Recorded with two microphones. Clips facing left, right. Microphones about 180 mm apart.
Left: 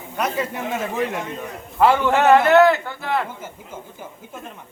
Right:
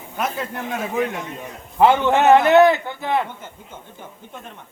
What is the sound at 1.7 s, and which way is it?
A man's voice, 20° right (ahead or behind).